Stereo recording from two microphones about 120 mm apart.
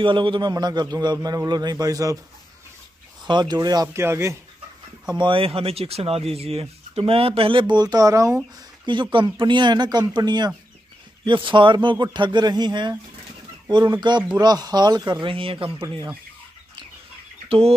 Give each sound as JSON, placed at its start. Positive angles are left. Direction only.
{"t": 0.0, "sound": "a man's voice", "side_deg": -45}
{"t": 3.3, "sound": "a man's voice", "side_deg": -35}
{"t": 4.0, "sound": "speech", "side_deg": -25}
{"t": 5.0, "sound": "speech", "side_deg": -40}
{"t": 9.1, "sound": "a man's voice", "side_deg": -40}
{"t": 17.5, "sound": "a sound", "side_deg": -55}